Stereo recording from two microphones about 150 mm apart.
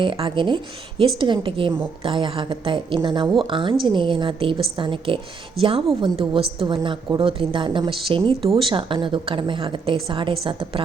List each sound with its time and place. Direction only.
0.0 s a woman's voice: 35° right (ahead or behind)